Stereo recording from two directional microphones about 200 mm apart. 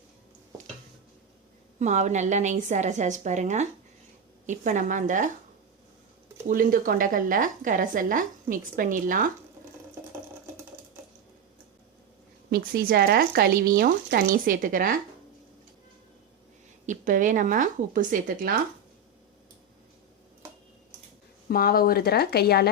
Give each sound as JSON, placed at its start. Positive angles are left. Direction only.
{"t": 1.8, "sound": "a woman's voice", "side_deg": -35}
{"t": 6.5, "sound": "a woman's voice", "side_deg": -45}
{"t": 12.5, "sound": "a woman's voice", "side_deg": -50}
{"t": 16.8, "sound": "a woman's voice", "side_deg": -40}
{"t": 21.5, "sound": "speech", "side_deg": 50}